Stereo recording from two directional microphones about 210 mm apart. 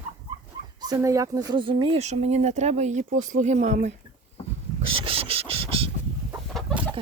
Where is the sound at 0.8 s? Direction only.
15° right (ahead or behind); by 4.0 s 35° right (ahead or behind).